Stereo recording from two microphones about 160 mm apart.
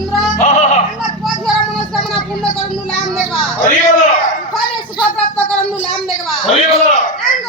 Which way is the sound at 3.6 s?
50° left (ahead or behind).